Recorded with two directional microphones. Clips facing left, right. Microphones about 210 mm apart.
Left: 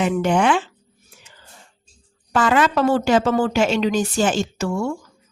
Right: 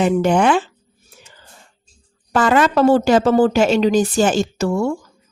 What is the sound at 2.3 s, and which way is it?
A woman's voice, 40° right (ahead or behind).